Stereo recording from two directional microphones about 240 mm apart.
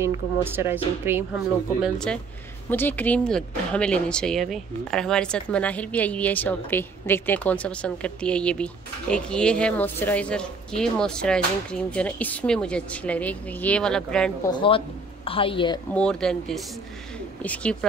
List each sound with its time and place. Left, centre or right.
0.0 s speech: centre
1.8 s speech: centre
14.5 s a woman's voice: left
15.9 s speech: centre